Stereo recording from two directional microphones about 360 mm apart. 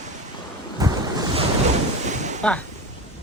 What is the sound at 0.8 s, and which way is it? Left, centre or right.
Ocean, centre.